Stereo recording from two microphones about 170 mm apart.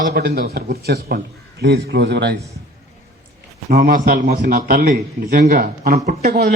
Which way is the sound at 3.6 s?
60° right (ahead or behind).